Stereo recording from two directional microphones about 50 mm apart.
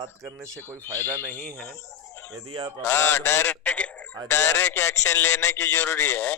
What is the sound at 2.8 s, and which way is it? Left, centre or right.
Speech, left.